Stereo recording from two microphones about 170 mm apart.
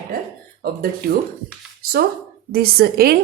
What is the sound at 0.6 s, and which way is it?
Speech, 60° right (ahead or behind).